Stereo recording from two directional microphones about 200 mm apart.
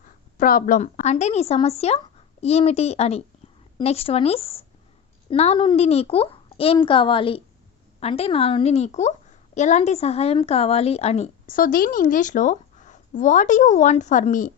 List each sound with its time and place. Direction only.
0.3 s a child's voice: 45° left (ahead or behind)